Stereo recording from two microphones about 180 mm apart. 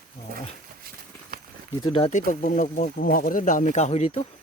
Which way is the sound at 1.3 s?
55° right (ahead or behind).